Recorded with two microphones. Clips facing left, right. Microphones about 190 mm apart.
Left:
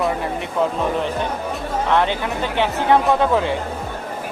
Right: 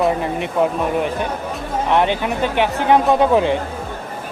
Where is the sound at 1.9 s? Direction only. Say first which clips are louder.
Right 3 dB; 15° right (ahead or behind).